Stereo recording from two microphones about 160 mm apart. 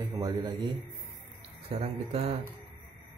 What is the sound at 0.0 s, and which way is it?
A man's voice, 20° right (ahead or behind).